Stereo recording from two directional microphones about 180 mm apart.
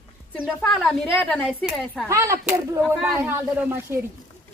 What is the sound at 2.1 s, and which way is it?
A woman's voice, 15° right (ahead or behind).